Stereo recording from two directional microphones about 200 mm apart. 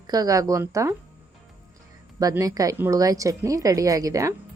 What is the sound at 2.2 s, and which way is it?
Speech, 15° right (ahead or behind).